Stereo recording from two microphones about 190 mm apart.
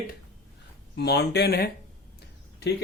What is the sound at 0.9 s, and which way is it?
Speech, 60° left (ahead or behind).